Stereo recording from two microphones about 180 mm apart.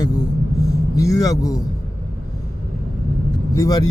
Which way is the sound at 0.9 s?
20° left (ahead or behind).